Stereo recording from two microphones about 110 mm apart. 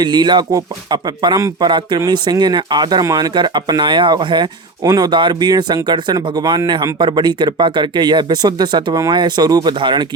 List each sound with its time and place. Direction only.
0.0 s speech: 40° right (ahead or behind)
4.8 s speech: 35° right (ahead or behind)